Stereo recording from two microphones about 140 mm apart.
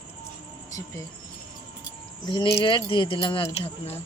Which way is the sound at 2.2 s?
35° left (ahead or behind).